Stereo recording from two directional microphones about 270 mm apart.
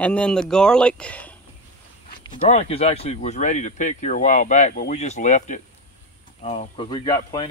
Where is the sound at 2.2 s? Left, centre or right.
Left.